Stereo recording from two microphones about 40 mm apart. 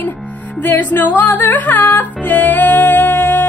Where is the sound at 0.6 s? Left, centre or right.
Left.